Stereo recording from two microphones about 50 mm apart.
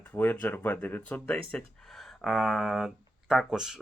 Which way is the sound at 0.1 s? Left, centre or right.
Left.